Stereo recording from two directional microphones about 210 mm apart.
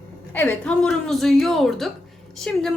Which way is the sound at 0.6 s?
Centre (ahead or behind).